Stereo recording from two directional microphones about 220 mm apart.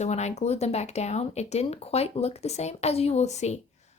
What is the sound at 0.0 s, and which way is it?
Speech, 30° left (ahead or behind).